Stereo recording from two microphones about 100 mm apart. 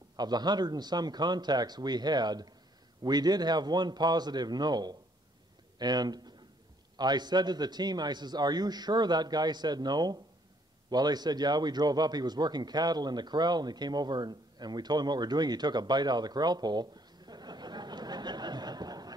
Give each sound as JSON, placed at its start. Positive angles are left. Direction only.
{"t": 0.1, "sound": "a man's voice", "side_deg": -45}